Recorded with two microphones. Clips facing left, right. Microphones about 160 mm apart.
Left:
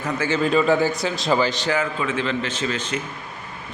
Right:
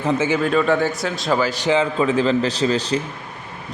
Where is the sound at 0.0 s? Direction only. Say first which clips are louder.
Right 6 dB; 25° right (ahead or behind).